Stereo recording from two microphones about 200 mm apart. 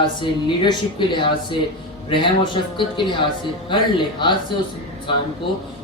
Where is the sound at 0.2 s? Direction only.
25° left (ahead or behind).